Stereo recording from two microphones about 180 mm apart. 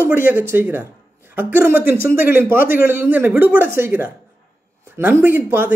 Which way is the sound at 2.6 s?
50° left (ahead or behind).